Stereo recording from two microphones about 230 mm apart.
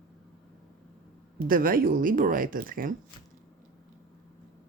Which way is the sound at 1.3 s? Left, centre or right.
Right.